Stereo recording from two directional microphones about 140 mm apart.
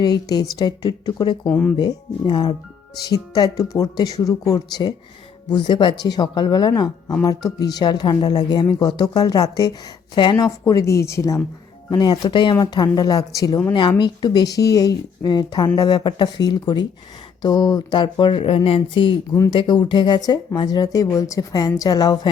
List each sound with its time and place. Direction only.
0.0 s speech: 30° left (ahead or behind)
1.5 s speech: 10° left (ahead or behind)
1.8 s speech: 30° left (ahead or behind)